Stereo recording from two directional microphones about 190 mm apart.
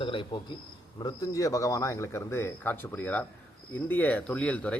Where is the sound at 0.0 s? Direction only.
25° left (ahead or behind).